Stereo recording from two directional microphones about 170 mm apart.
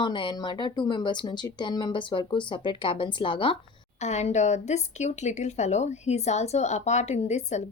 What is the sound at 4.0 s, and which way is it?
Speech, 40° left (ahead or behind).